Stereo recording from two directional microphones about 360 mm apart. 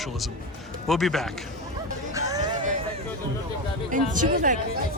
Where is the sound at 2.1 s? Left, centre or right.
Centre.